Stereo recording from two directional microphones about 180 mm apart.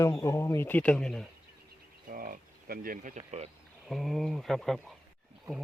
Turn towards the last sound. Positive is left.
turn(degrees=0)  # may be behind; listen again after turning